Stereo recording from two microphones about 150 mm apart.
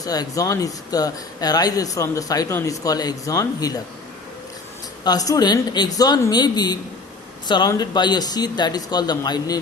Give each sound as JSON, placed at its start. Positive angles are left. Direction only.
{"t": 0.0, "sound": "speech", "side_deg": 25}
{"t": 5.0, "sound": "speech", "side_deg": 25}